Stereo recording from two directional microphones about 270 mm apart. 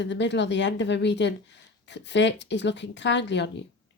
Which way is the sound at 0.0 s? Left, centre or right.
Left.